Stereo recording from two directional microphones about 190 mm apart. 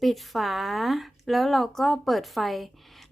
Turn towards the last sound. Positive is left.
turn(degrees=0)  # may be behind; listen again after turning